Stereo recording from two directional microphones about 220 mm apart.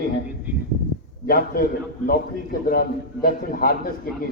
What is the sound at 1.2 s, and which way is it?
A man's voice, 40° left (ahead or behind).